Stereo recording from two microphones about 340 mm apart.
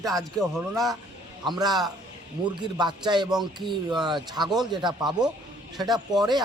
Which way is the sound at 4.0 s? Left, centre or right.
Centre.